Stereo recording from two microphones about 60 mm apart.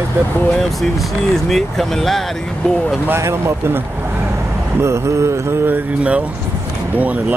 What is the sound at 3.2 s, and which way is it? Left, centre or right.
Mantra, right.